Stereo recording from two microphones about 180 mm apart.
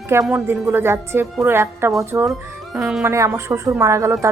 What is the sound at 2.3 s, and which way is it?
Speech, 5° right (ahead or behind).